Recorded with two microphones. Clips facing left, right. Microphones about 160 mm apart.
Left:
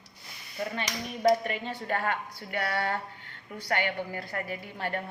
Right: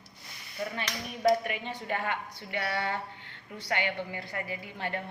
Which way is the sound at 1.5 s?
15° right (ahead or behind).